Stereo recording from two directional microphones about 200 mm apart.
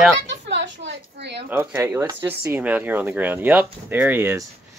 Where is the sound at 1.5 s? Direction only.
10° right (ahead or behind).